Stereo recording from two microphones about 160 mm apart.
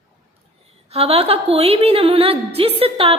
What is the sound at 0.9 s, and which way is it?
A woman's voice, 40° right (ahead or behind).